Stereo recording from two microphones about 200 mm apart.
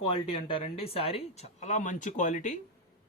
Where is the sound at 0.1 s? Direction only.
25° left (ahead or behind).